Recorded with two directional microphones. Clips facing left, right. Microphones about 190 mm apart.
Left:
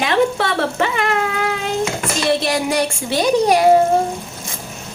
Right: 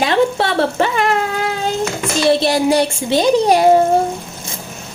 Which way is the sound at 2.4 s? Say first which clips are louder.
Right 4 dB; 30° right (ahead or behind).